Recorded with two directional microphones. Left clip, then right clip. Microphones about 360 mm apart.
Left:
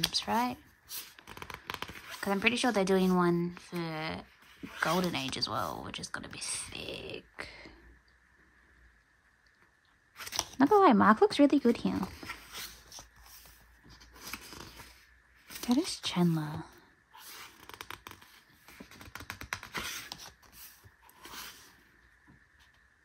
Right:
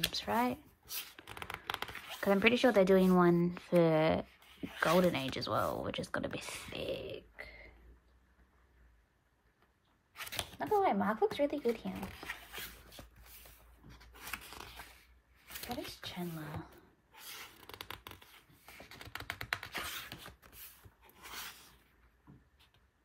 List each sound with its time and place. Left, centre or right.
0.0 s speech: centre
10.6 s speech: centre
15.9 s a sound: centre
19.1 s typing: centre